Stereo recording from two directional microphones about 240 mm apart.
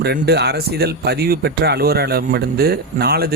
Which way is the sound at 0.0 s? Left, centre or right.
Right.